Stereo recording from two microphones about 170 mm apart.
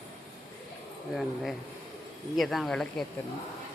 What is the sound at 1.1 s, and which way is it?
Speech, centre (ahead or behind).